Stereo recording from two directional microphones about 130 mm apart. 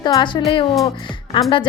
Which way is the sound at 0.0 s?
35° left (ahead or behind).